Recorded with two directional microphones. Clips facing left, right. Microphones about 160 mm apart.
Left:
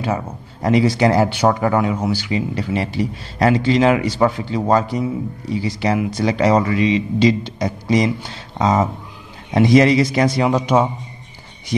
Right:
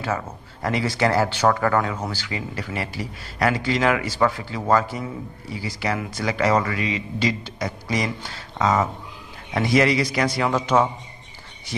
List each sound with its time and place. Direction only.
0.0 s speech: 20° left (ahead or behind)